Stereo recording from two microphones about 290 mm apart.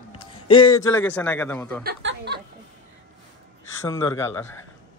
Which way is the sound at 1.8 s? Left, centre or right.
Right.